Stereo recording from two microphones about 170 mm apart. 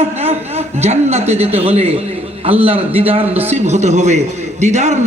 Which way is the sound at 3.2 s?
10° right (ahead or behind).